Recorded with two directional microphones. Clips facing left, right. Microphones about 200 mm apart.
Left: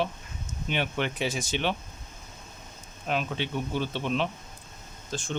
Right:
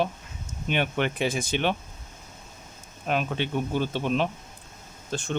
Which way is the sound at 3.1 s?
50° right (ahead or behind).